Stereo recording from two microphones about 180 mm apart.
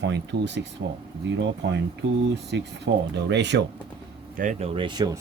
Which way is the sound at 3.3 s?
75° right (ahead or behind).